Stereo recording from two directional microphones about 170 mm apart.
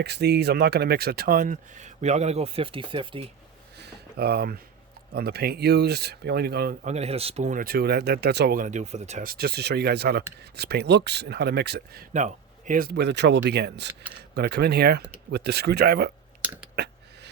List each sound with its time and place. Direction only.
0.0 s speech: 75° right (ahead or behind); by 3.2 s 30° right (ahead or behind)
3.8 s speech: 70° right (ahead or behind)
6.8 s speech: 40° right (ahead or behind)
9.2 s speech: 60° right (ahead or behind)
12.1 s speech: 45° right (ahead or behind); by 16.1 s 70° right (ahead or behind)
16.7 s a sound: 85° right